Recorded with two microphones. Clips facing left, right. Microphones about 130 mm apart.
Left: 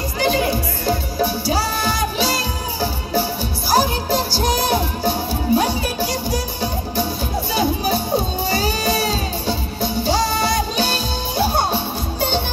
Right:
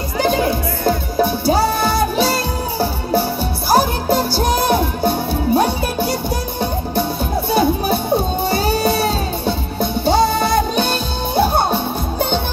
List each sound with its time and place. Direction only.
0.8 s music: 55° right (ahead or behind)
7.5 s music: 55° right (ahead or behind)